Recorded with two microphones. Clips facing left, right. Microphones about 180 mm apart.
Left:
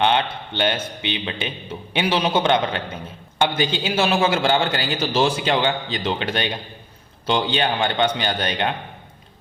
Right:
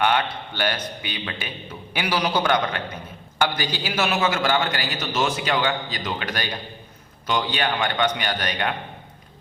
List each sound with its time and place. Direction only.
0.0 s a man's voice: 25° left (ahead or behind)